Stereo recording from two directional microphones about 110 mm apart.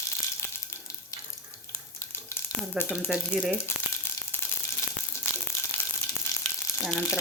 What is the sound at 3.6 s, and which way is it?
Frying, 20° left (ahead or behind).